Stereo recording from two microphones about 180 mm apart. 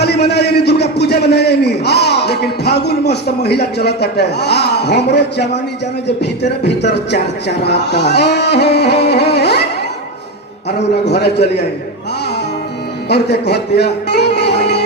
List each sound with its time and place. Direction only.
0.0 s a man's voice: 65° left (ahead or behind)
10.7 s speech: 65° left (ahead or behind)
13.1 s speech: 65° left (ahead or behind)